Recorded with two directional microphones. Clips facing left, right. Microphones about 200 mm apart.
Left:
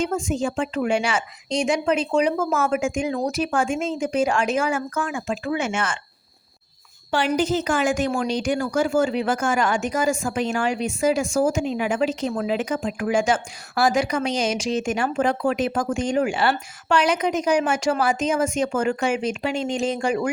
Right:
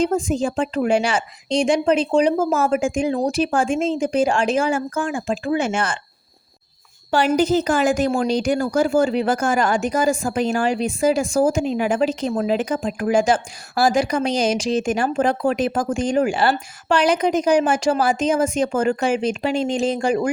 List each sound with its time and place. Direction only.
0.0 s a woman's voice: 35° right (ahead or behind)
7.1 s a woman's voice: 40° right (ahead or behind)